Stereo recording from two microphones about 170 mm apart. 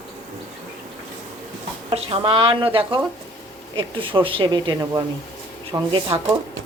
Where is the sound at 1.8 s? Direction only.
35° right (ahead or behind).